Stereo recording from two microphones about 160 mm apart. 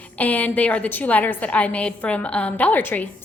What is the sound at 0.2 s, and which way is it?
A woman's voice, 10° left (ahead or behind).